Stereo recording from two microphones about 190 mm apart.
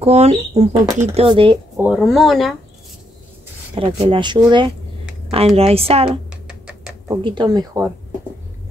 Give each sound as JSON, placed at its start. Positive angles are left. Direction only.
{"t": 0.0, "sound": "speech", "side_deg": -35}
{"t": 1.8, "sound": "speech", "side_deg": -5}
{"t": 3.7, "sound": "speech", "side_deg": -25}
{"t": 6.3, "sound": "a sound", "side_deg": -5}
{"t": 7.1, "sound": "speech", "side_deg": -20}